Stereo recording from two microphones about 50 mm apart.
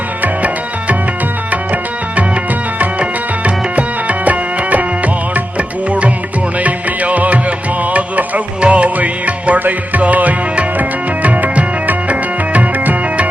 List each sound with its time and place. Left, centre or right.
0.2 s music: right
2.7 s music: right